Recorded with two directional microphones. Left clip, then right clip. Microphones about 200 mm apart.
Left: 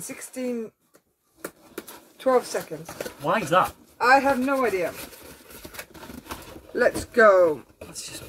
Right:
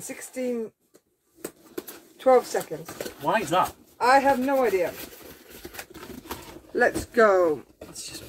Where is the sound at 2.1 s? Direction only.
5° right (ahead or behind).